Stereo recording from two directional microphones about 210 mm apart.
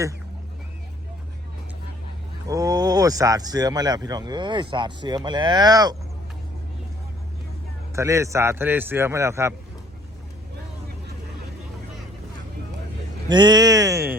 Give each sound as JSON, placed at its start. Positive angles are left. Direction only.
{"t": 2.5, "sound": "speech", "side_deg": -15}
{"t": 7.9, "sound": "a man's voice", "side_deg": -15}
{"t": 13.2, "sound": "a man's voice", "side_deg": -20}